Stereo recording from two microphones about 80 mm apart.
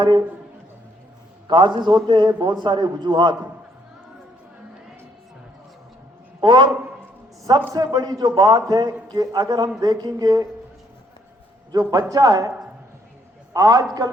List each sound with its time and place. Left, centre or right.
1.5 s a man's voice: right
6.4 s a man's voice: right
7.7 s a man's voice: right
11.7 s a man's voice: right
13.5 s a man's voice: right